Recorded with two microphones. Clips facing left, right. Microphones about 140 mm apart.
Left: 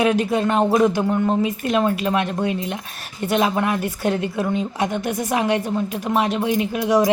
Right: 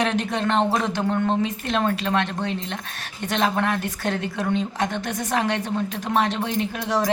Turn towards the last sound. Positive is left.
turn(degrees=10)  # may be behind; listen again after turning